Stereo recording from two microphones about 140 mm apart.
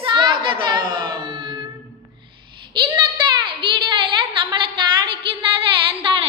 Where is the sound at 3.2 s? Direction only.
35° right (ahead or behind).